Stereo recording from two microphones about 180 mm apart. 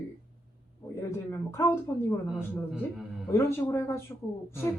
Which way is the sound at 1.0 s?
15° left (ahead or behind).